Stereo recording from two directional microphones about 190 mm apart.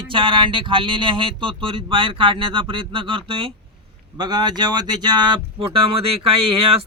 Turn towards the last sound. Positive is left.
turn(degrees=-30)  # may be behind; listen again after turning